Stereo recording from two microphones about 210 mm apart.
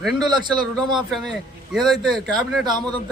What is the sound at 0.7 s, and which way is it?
A man's voice, centre (ahead or behind).